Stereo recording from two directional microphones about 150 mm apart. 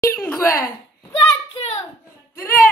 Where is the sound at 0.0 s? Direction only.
15° left (ahead or behind).